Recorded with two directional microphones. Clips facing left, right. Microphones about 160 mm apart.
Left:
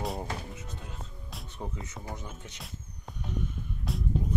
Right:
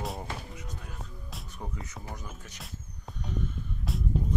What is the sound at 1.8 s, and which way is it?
Speech, 25° left (ahead or behind).